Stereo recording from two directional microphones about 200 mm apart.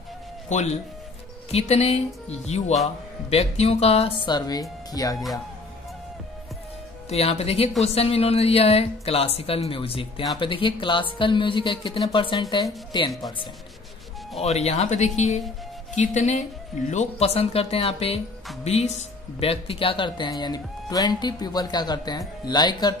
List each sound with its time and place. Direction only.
0.5 s speech: 35° left (ahead or behind); by 5.1 s 20° left (ahead or behind)
7.1 s speech: 30° left (ahead or behind)
14.4 s speech: 35° left (ahead or behind)